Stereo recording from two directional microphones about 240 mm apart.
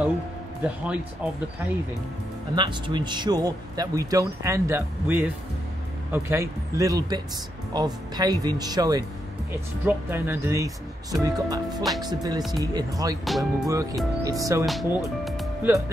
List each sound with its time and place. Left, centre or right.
0.7 s speech: centre
2.5 s a man's voice: centre
13.2 s speech: centre
13.7 s a man's voice: centre
14.7 s speech: centre